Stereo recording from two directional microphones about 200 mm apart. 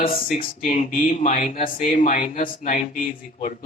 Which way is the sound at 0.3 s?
40° left (ahead or behind).